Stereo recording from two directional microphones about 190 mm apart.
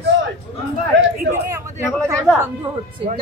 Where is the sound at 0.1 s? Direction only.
80° right.